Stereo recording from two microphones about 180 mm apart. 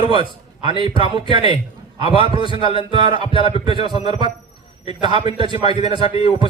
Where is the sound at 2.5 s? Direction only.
30° left (ahead or behind).